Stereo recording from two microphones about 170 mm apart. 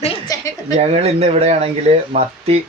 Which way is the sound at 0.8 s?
40° right (ahead or behind).